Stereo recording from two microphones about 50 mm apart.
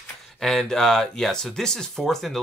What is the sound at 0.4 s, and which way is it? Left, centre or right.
Speech, centre.